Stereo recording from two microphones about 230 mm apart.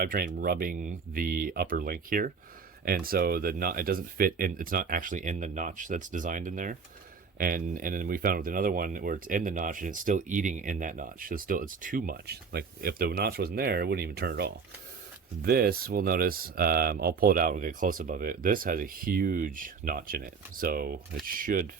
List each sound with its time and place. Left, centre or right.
0.0 s speech: right